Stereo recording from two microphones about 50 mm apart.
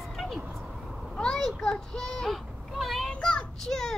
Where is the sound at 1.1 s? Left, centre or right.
Centre.